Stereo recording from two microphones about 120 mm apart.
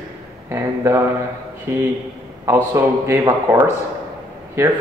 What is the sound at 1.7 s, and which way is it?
A man's voice, 20° right (ahead or behind).